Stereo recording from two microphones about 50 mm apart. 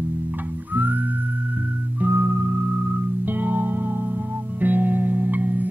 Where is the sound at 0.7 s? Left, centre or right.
Right.